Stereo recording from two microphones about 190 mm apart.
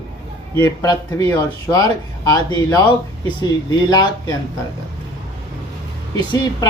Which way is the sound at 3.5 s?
20° left (ahead or behind).